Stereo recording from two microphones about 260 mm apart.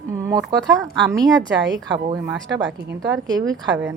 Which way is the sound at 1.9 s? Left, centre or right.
Centre.